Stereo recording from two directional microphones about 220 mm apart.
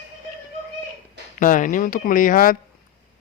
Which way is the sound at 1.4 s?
35° left (ahead or behind).